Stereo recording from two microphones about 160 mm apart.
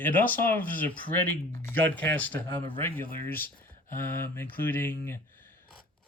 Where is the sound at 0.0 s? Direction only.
10° left (ahead or behind).